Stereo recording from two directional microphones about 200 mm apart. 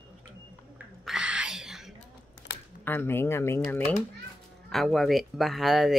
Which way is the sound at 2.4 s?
65° left (ahead or behind).